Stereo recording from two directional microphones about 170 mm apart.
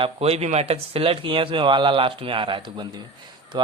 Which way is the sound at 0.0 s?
35° right (ahead or behind).